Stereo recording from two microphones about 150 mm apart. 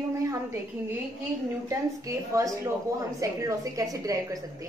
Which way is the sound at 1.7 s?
20° right (ahead or behind).